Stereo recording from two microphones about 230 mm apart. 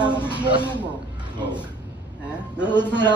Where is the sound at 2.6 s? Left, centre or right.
Centre.